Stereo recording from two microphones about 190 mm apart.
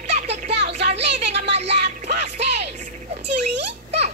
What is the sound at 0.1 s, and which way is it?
Music, 35° right (ahead or behind).